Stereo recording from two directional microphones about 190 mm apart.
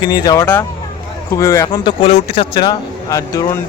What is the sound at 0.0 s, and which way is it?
Speech, 20° left (ahead or behind).